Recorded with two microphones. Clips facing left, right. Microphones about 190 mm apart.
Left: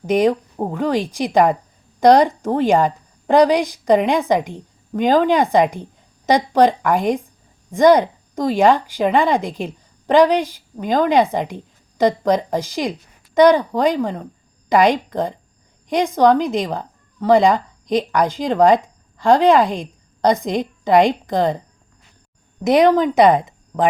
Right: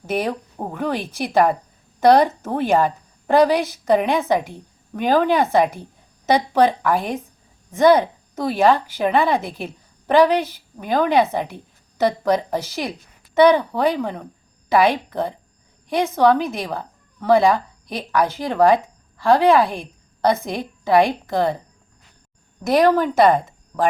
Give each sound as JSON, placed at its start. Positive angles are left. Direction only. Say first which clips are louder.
{"t": 0.0, "sound": "a woman's voice", "louder": "left 7 dB", "side_deg": 15}
{"t": 22.6, "sound": "speech", "louder": "left 3 dB", "side_deg": 20}